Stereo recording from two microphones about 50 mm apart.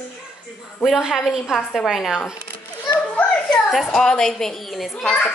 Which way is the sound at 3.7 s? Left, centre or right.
Centre.